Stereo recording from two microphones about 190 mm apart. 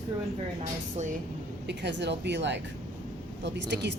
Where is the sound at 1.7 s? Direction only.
65° right (ahead or behind).